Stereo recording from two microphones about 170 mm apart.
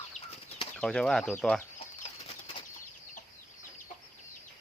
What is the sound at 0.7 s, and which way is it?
Speech, 5° left (ahead or behind).